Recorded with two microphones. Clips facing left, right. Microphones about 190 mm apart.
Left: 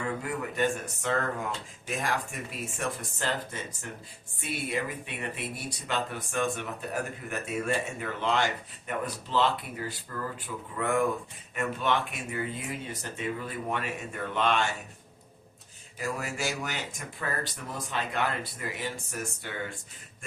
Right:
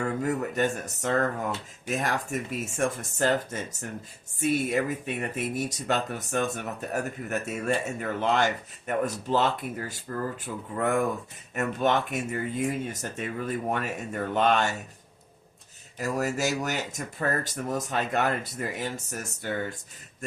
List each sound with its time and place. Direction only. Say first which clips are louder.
0.3 s speech: right 1 dB; 45° right (ahead or behind)
16.0 s speech: right 6 dB; 40° right (ahead or behind)